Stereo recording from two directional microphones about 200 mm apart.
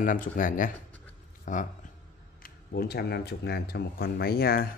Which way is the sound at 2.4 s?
50° left (ahead or behind).